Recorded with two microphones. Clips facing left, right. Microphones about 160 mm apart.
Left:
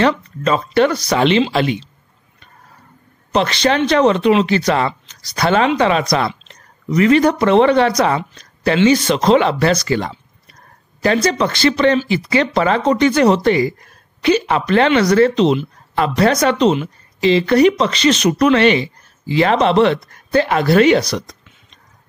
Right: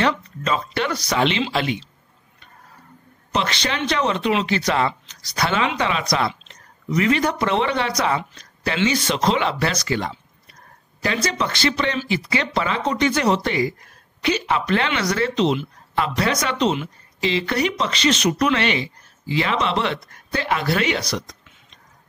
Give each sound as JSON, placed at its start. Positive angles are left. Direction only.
{"t": 0.0, "sound": "speech", "side_deg": 45}
{"t": 3.3, "sound": "speech", "side_deg": 45}